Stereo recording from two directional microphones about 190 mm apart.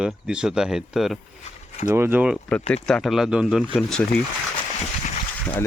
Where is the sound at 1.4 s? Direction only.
40° left (ahead or behind).